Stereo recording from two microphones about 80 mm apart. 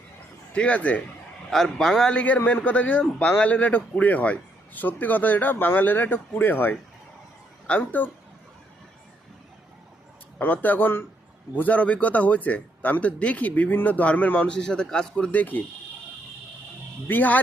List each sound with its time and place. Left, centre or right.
0.5 s speech: centre
1.5 s a man's voice: centre; by 8.1 s left
10.3 s a man's voice: left
17.1 s a man's voice: left